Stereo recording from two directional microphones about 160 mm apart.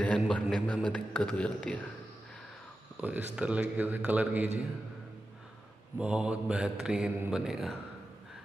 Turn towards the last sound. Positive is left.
turn(degrees=0)  # may be behind; listen again after turning